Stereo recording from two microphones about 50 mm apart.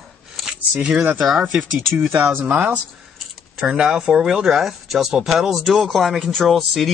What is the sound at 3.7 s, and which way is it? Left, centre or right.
Speech, centre.